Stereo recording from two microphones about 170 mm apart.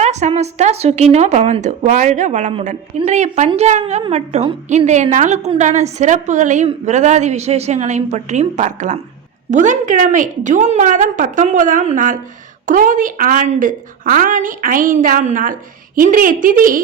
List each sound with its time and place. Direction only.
0.0 s a woman's voice: 40° right (ahead or behind)
4.9 s a woman's voice: 45° right (ahead or behind)